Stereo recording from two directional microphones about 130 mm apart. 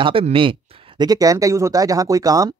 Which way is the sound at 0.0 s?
45° right (ahead or behind).